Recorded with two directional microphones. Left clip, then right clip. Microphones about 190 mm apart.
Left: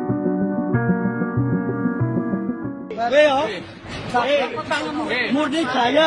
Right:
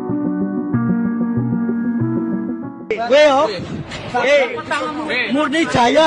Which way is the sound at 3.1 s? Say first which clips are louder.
Right 4 dB; 15° right (ahead or behind).